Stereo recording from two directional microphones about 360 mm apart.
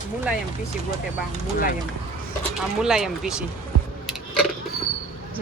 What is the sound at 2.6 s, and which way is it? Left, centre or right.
Speech, centre.